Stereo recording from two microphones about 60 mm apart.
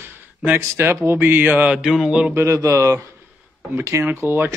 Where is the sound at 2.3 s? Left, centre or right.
Right.